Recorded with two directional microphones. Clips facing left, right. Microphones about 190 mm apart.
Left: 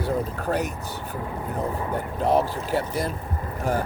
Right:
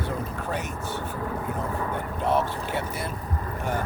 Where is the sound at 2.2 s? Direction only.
35° left (ahead or behind).